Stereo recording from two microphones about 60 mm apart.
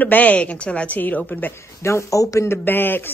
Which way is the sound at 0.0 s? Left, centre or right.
Left.